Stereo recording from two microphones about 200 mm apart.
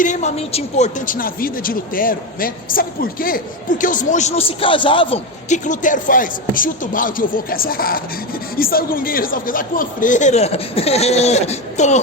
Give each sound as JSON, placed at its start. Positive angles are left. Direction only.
{"t": 0.0, "sound": "speech", "side_deg": 35}